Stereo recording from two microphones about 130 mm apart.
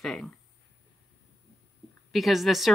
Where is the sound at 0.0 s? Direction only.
5° left (ahead or behind).